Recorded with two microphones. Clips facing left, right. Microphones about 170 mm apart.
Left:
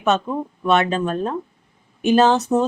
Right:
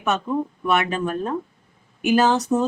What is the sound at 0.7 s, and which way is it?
Speech, 25° left (ahead or behind).